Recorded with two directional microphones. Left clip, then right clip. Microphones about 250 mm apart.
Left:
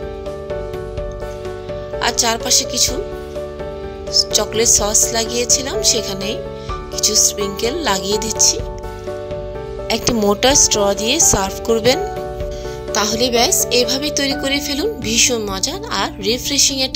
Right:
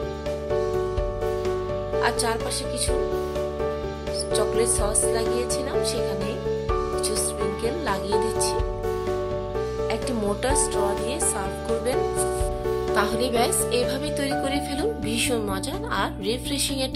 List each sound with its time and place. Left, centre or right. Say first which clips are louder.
2.0 s speech: left 7 dB; left
4.1 s speech: left 7 dB; left
9.8 s speech: left 9 dB; left